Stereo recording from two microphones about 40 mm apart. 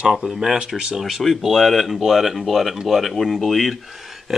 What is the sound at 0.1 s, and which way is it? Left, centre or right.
Speech, centre.